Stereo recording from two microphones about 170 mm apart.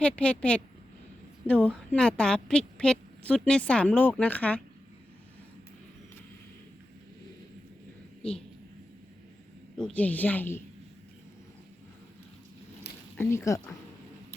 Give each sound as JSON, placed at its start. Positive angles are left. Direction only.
{"t": 0.0, "sound": "a woman's voice", "side_deg": 5}
{"t": 9.7, "sound": "a woman's voice", "side_deg": 5}
{"t": 13.1, "sound": "a woman's voice", "side_deg": 15}